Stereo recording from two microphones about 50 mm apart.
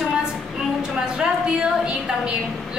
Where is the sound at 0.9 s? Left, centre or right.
Centre.